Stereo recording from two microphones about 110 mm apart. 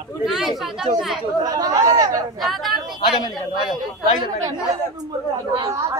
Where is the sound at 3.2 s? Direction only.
40° left (ahead or behind).